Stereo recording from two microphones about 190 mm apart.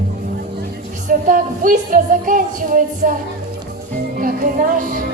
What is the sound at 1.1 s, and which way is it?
Music, 45° right (ahead or behind).